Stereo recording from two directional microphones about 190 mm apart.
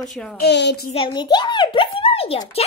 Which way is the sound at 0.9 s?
25° left (ahead or behind).